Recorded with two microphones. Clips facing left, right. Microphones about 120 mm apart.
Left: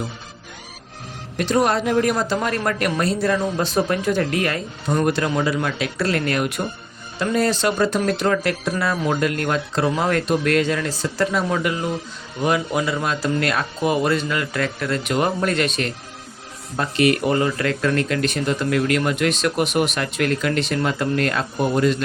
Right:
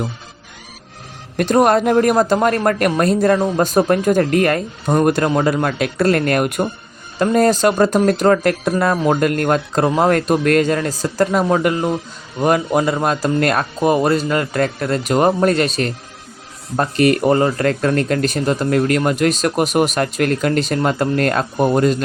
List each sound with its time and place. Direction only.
1.4 s a woman's voice: 50° right (ahead or behind)